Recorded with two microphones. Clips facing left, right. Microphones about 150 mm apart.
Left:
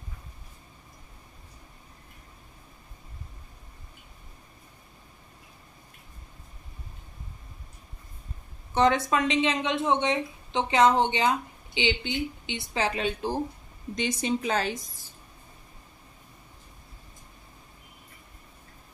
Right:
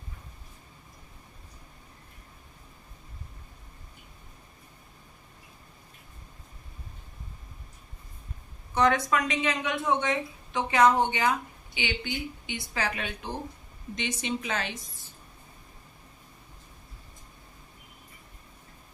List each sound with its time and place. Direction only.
8.7 s a woman's voice: 25° left (ahead or behind)